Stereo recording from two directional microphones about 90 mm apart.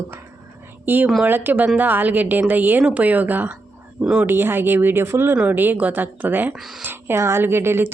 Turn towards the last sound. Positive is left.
turn(degrees=-25)  # may be behind; listen again after turning